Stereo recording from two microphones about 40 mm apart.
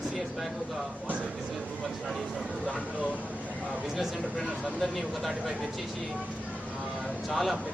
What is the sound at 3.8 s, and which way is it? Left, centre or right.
Speech, centre.